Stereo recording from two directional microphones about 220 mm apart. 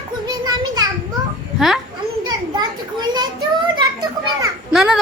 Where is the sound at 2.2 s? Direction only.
20° right (ahead or behind).